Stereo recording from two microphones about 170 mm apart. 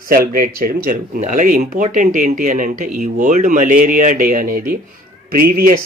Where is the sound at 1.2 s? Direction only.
50° right (ahead or behind).